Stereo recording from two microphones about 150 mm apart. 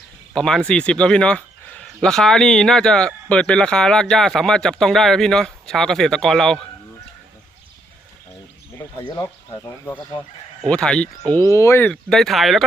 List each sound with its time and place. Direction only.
0.3 s speech: 5° left (ahead or behind)
10.6 s speech: 5° left (ahead or behind)
11.4 s speech: 20° left (ahead or behind)
12.0 s speech: centre (ahead or behind)